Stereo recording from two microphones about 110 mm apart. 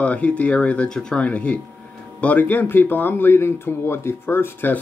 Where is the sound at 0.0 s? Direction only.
10° left (ahead or behind).